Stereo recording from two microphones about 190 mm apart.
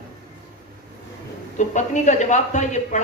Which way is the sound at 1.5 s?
40° left (ahead or behind).